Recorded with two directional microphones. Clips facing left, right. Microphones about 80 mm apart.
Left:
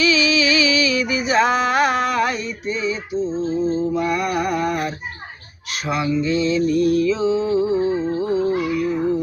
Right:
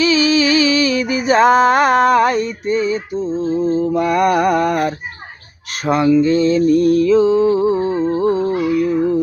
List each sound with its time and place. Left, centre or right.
0.0 s music: right
5.8 s speech: right
6.1 s mantra: right